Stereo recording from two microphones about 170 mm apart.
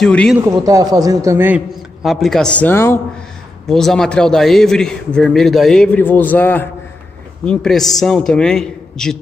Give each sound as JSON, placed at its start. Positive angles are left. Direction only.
{"t": 0.0, "sound": "a man's voice", "side_deg": 5}
{"t": 0.7, "sound": "a man's voice", "side_deg": -20}
{"t": 1.7, "sound": "a man's voice", "side_deg": 0}
{"t": 3.6, "sound": "a man's voice", "side_deg": 5}